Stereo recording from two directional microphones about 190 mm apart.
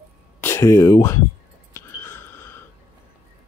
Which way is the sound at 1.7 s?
10° left (ahead or behind).